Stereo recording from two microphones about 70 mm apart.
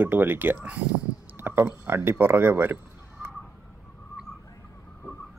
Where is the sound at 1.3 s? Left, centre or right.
Right.